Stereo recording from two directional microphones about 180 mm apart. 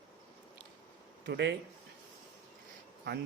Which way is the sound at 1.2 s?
70° right (ahead or behind).